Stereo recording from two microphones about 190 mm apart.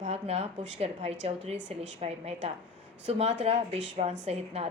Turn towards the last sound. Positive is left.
turn(degrees=-35)  # may be behind; listen again after turning